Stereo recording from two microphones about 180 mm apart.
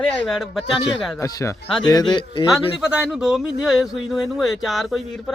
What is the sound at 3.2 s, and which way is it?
Speech, centre (ahead or behind).